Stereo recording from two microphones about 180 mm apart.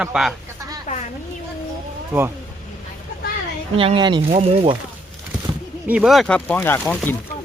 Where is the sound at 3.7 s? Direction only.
30° right (ahead or behind).